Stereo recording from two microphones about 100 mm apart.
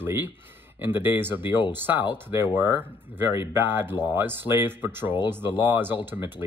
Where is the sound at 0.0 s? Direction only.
20° right (ahead or behind).